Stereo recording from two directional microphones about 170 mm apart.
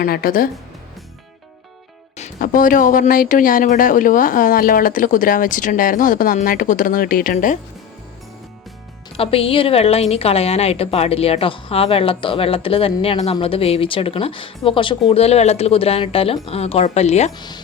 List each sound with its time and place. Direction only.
0.0 s speech: 55° left (ahead or behind)
2.1 s speech: 50° left (ahead or behind)
9.1 s a woman's voice: 35° left (ahead or behind)
17.3 s speech: 25° left (ahead or behind)